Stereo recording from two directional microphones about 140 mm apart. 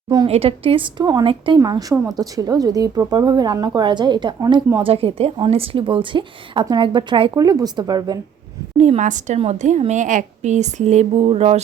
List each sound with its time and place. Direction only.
0.3 s a woman's voice: 45° right (ahead or behind)
1.5 s a woman's voice: 25° right (ahead or behind)
8.8 s a woman's voice: 55° right (ahead or behind)